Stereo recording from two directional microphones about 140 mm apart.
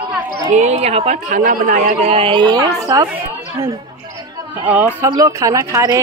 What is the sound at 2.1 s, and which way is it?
Speech, 40° right (ahead or behind).